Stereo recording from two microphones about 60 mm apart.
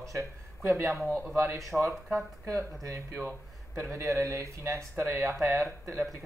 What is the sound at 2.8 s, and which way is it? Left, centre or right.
Speech, right.